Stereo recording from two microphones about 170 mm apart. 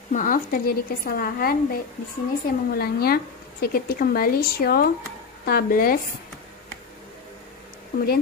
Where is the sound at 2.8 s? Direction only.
60° left (ahead or behind).